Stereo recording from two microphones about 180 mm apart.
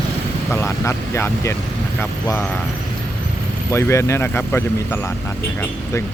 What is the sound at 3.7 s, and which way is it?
Speech, 15° left (ahead or behind).